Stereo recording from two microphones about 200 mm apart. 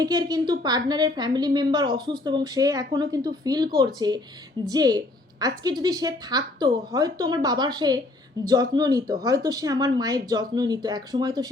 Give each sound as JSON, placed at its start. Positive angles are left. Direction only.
{"t": 0.0, "sound": "a woman's voice", "side_deg": -20}